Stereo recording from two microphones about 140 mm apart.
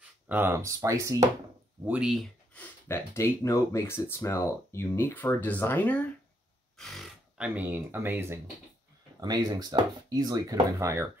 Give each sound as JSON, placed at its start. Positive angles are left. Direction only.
{"t": 0.3, "sound": "speech", "side_deg": -15}
{"t": 1.9, "sound": "speech", "side_deg": -5}
{"t": 2.5, "sound": "speech", "side_deg": 20}
{"t": 6.8, "sound": "speech", "side_deg": 0}
{"t": 9.2, "sound": "speech", "side_deg": -30}